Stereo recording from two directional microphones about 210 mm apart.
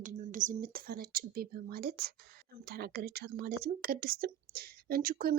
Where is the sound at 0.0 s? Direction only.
40° right (ahead or behind).